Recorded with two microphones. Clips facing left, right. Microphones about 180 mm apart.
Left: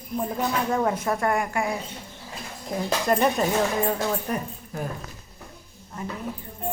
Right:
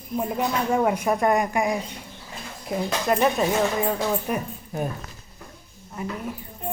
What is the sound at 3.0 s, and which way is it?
Speech, centre (ahead or behind).